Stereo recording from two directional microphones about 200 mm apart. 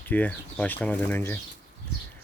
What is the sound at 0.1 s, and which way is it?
Speech, 10° left (ahead or behind).